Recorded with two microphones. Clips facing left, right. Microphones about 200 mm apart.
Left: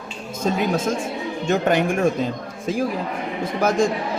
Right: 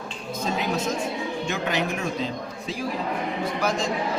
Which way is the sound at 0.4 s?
50° left (ahead or behind).